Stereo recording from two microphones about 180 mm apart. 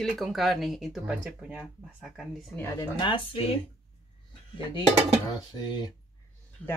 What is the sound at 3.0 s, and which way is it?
Speech, 25° left (ahead or behind).